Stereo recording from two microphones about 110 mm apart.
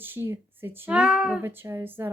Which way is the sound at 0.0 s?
20° right (ahead or behind).